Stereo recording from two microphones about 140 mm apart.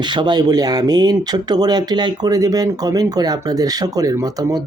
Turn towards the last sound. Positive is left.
turn(degrees=-25)  # may be behind; listen again after turning